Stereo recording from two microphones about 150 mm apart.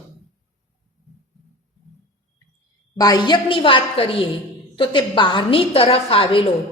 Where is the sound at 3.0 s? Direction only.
25° left (ahead or behind).